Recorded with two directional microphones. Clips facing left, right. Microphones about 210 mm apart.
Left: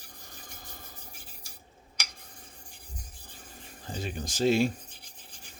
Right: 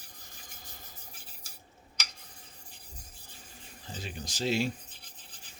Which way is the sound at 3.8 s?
50° left (ahead or behind).